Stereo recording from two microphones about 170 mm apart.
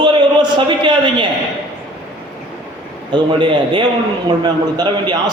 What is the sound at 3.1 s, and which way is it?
A man's voice, 30° right (ahead or behind).